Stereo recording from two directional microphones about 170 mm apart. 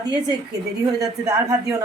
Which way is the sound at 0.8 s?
20° right (ahead or behind).